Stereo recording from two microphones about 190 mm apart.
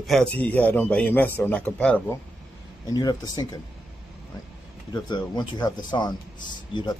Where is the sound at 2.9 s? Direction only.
20° left (ahead or behind).